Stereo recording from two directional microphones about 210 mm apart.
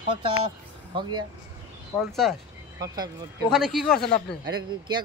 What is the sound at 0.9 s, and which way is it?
Speech, 20° right (ahead or behind).